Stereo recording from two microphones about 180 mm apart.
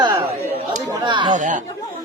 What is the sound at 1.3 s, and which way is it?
Speech, 45° right (ahead or behind).